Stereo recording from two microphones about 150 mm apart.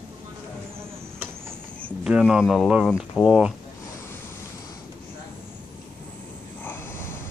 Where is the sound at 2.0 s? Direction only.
5° right (ahead or behind).